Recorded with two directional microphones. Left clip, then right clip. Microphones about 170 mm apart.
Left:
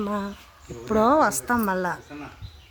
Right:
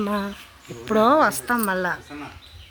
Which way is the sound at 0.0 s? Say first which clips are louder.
Right 3 dB; centre (ahead or behind).